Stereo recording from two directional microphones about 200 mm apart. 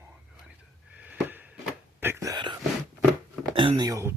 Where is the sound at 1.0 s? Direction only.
10° right (ahead or behind).